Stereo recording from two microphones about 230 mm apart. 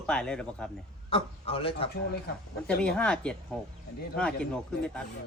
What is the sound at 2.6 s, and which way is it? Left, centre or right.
Speech, centre.